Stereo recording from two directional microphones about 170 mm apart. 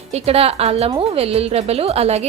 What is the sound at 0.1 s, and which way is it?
A woman's voice, 35° right (ahead or behind).